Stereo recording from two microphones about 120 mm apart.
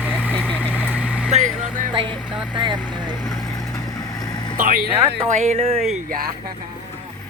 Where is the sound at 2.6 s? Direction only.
40° right (ahead or behind).